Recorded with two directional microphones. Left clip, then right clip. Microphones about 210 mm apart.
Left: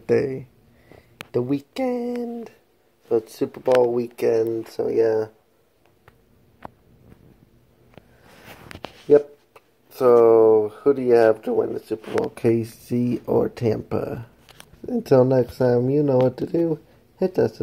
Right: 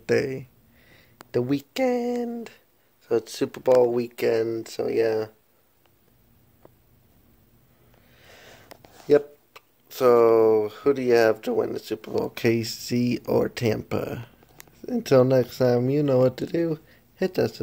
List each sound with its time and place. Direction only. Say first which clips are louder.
0.0 s speech: left 3 dB; centre (ahead or behind)
3.1 s speech: left 2 dB; 15° right (ahead or behind)
5.0 s speech: left 5 dB; 20° right (ahead or behind)
9.9 s speech: left 3 dB; 5° right (ahead or behind)
15.3 s speech: left 1 dB; 20° right (ahead or behind)
15.6 s speech: left 3 dB; 5° right (ahead or behind)
16.7 s a sound: left 5 dB; centre (ahead or behind)